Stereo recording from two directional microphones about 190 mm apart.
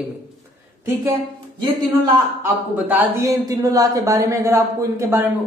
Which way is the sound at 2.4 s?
10° right (ahead or behind).